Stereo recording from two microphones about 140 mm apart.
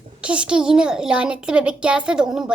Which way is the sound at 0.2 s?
10° right (ahead or behind).